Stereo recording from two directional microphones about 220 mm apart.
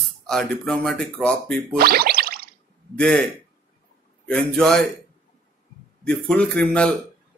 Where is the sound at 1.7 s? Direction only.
45° right (ahead or behind).